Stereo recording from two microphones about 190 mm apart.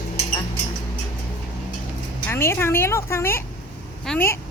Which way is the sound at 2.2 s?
15° left (ahead or behind).